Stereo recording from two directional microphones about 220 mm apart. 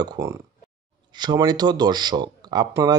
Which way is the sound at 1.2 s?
20° right (ahead or behind).